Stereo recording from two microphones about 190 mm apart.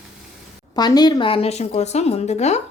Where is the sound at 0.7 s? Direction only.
20° left (ahead or behind).